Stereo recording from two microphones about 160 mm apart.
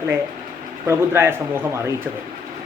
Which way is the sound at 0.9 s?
15° right (ahead or behind).